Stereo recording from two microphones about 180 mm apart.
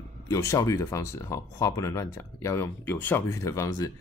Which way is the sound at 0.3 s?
20° left (ahead or behind).